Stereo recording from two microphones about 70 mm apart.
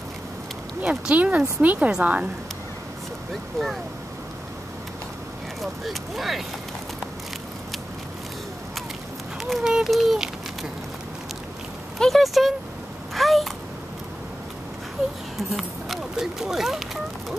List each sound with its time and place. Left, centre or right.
0.8 s a woman's voice: centre
5.6 s speech: centre
9.4 s speech: centre
12.0 s speech: centre
13.1 s a sound: centre
15.5 s speech: centre